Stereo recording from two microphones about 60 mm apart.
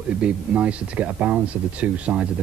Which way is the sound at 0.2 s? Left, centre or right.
Right.